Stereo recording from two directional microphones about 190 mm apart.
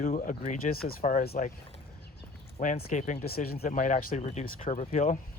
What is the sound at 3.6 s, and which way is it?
Speech, 40° left (ahead or behind).